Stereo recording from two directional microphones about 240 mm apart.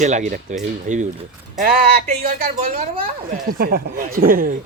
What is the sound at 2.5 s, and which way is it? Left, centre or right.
Speech, right.